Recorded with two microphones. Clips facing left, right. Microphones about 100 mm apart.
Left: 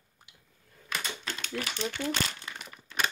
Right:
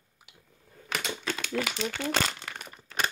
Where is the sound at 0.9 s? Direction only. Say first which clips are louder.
Right 2 dB; 90° right.